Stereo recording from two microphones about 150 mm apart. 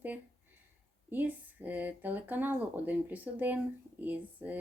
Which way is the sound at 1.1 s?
10° right (ahead or behind).